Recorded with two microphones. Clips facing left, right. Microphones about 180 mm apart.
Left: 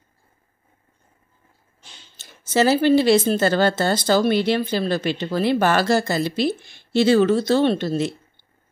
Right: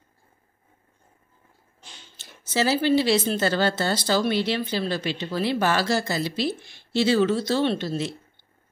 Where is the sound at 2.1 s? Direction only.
50° left (ahead or behind).